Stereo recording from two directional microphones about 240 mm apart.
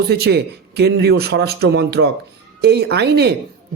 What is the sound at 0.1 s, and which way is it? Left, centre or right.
A man's voice, right.